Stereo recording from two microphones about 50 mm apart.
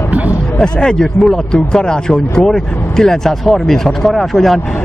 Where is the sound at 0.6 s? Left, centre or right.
Centre.